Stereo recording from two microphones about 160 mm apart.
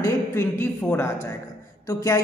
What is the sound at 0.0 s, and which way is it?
A woman's voice, 15° left (ahead or behind).